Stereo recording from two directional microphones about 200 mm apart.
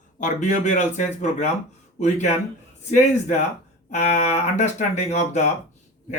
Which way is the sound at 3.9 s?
35° left (ahead or behind).